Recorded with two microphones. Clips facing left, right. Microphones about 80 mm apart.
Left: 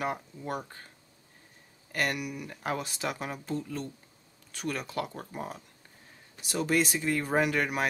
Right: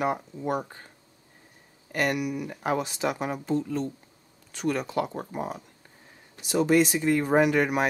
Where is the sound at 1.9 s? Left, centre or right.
Centre.